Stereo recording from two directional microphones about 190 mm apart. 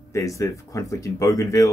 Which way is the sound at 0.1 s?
15° left (ahead or behind).